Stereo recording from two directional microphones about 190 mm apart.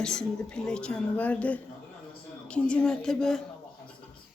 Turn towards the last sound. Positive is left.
turn(degrees=0)  # may be behind; listen again after turning